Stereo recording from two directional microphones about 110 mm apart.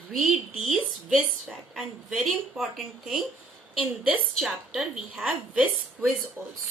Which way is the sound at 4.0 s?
5° right (ahead or behind).